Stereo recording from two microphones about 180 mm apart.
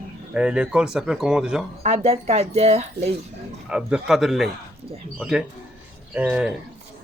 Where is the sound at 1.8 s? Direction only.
35° right (ahead or behind).